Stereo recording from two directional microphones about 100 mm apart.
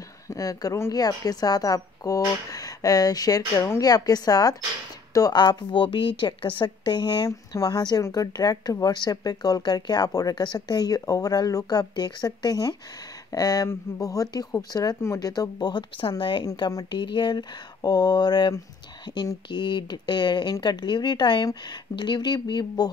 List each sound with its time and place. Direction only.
0.3 s a woman's voice: 35° left (ahead or behind)
7.2 s a woman's voice: 35° left (ahead or behind)
16.2 s a woman's voice: 55° left (ahead or behind)
16.4 s a woman's voice: 40° left (ahead or behind)